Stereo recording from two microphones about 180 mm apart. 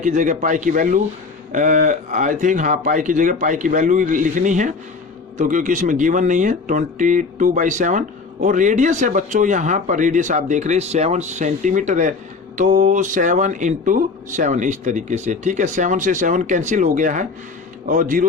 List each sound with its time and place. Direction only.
0.0 s speech: 45° right (ahead or behind)